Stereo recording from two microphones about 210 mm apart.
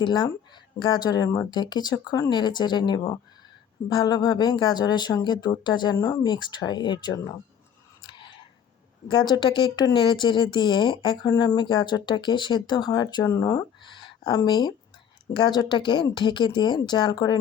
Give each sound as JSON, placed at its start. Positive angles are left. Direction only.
{"t": 0.0, "sound": "speech", "side_deg": 20}
{"t": 9.0, "sound": "speech", "side_deg": 20}